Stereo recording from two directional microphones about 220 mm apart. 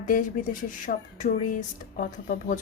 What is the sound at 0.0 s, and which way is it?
A woman's voice, 35° left (ahead or behind).